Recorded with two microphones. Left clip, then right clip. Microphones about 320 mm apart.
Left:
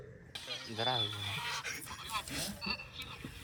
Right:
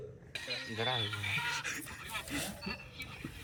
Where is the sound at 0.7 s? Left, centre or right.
Left.